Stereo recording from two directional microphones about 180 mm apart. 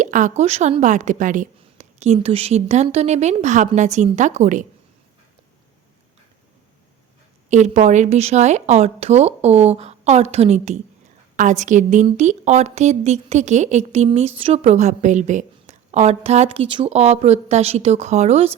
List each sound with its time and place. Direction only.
0.0 s a woman's voice: 45° right (ahead or behind)
7.5 s a woman's voice: 40° right (ahead or behind)